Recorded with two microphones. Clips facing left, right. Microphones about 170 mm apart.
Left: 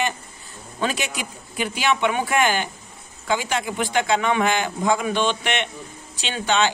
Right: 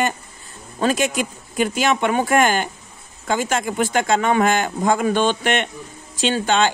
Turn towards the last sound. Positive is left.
turn(degrees=-45)  # may be behind; listen again after turning